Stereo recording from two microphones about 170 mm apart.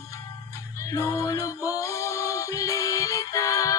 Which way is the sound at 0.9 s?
20° left (ahead or behind).